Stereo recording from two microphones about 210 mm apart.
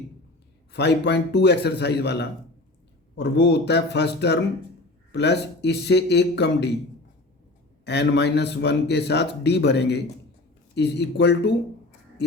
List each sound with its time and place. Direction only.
0.7 s speech: 55° left (ahead or behind)
7.9 s speech: 55° left (ahead or behind)